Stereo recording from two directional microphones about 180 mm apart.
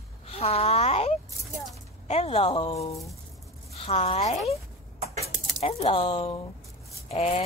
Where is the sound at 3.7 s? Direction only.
35° left (ahead or behind).